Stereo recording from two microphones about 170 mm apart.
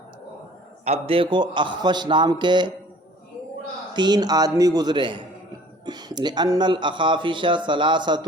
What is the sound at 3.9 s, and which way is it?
A man's voice, 25° right (ahead or behind).